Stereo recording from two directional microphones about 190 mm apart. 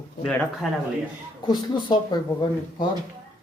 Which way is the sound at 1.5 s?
25° left (ahead or behind).